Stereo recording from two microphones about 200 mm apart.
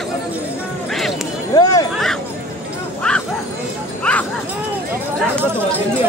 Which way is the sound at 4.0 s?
5° left (ahead or behind).